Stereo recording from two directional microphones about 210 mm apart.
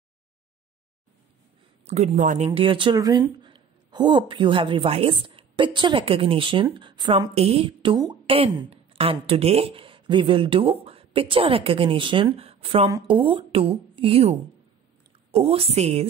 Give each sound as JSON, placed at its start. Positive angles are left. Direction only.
{"t": 1.9, "sound": "speech", "side_deg": -35}
{"t": 15.3, "sound": "speech", "side_deg": -30}